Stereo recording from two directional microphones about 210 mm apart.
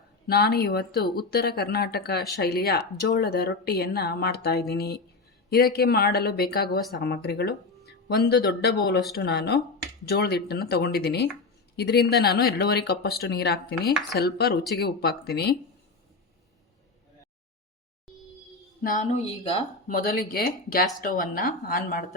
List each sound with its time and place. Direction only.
0.3 s speech: 45° left (ahead or behind)
18.8 s speech: 40° left (ahead or behind)
19.9 s speech: 45° left (ahead or behind)